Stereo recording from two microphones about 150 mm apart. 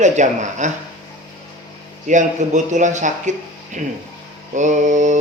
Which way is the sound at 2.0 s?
55° right (ahead or behind).